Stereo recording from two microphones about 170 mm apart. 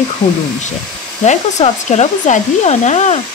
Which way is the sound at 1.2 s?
40° left (ahead or behind).